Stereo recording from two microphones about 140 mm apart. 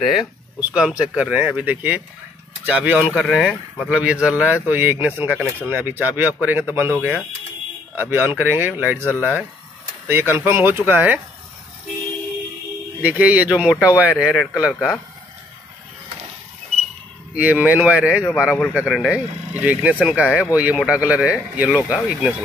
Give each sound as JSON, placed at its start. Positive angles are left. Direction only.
{"t": 0.0, "sound": "speech", "side_deg": -5}
{"t": 3.3, "sound": "speech", "side_deg": 0}
{"t": 9.0, "sound": "speech", "side_deg": 15}
{"t": 10.0, "sound": "speech", "side_deg": -15}
{"t": 13.0, "sound": "speech", "side_deg": -10}
{"t": 17.3, "sound": "speech", "side_deg": -10}